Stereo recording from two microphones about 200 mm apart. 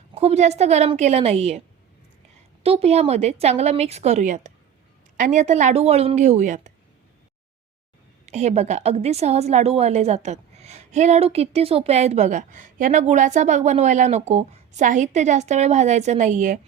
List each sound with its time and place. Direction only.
0.1 s a woman's voice: 30° right (ahead or behind)
2.6 s a woman's voice: 30° right (ahead or behind)
8.3 s a woman's voice: 35° right (ahead or behind)